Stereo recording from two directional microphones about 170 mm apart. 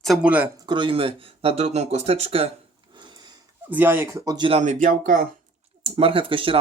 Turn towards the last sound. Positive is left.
turn(degrees=-30)  # may be behind; listen again after turning